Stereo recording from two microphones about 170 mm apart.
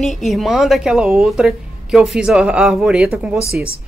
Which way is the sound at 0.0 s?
Centre (ahead or behind).